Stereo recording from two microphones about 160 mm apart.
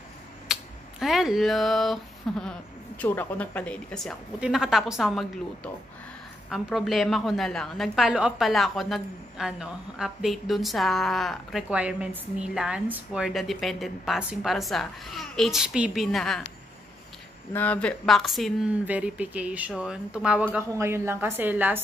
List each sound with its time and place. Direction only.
0.5 s a sound: centre (ahead or behind)
3.0 s a woman's voice: 10° left (ahead or behind)
17.5 s a woman's voice: 10° left (ahead or behind); by 21.8 s 10° right (ahead or behind)